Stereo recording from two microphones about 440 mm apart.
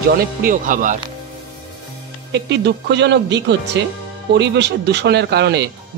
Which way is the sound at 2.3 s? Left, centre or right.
Right.